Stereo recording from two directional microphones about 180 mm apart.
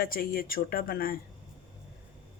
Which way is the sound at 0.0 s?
55° left (ahead or behind).